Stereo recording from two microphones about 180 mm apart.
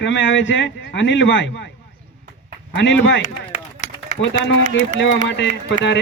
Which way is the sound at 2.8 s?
90° left.